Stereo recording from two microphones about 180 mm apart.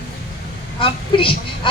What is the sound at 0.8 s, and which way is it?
Speech, 30° left (ahead or behind).